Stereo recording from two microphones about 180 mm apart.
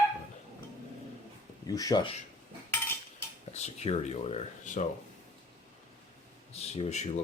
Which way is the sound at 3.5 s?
35° left (ahead or behind).